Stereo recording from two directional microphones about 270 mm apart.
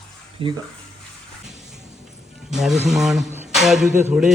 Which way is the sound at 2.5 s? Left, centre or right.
Centre.